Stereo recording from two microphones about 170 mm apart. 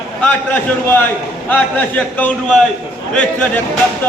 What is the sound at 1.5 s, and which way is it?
A man's voice, 10° left (ahead or behind).